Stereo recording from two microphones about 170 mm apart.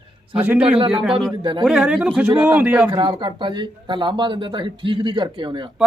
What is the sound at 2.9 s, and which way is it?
Speech, 25° right (ahead or behind).